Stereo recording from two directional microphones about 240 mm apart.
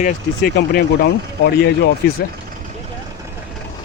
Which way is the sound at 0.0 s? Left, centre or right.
Left.